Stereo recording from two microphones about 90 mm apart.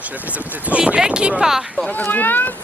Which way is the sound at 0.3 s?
15° right (ahead or behind).